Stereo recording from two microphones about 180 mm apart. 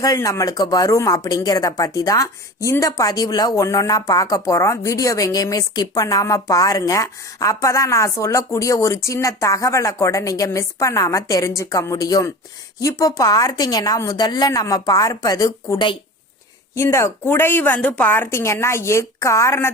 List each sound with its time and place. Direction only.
0.0 s a woman's voice: 20° left (ahead or behind)